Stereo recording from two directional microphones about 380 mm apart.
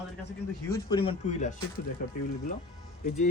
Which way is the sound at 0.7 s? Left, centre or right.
Centre.